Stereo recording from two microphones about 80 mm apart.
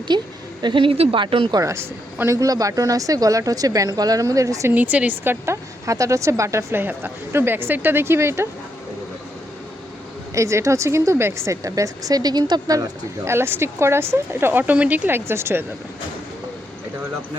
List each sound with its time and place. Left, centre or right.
0.1 s a woman's voice: right
0.6 s speech: right
1.5 s speech: right
4.7 s speech: centre
5.8 s speech: right
10.3 s speech: right
13.2 s speech: right
14.6 s speech: centre